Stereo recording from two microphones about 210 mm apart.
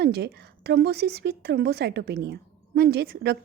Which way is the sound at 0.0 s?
50° right (ahead or behind).